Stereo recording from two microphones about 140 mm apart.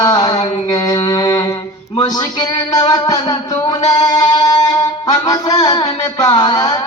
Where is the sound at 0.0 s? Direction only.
30° left (ahead or behind).